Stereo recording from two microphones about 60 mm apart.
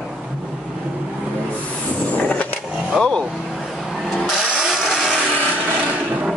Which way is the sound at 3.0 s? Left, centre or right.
Centre.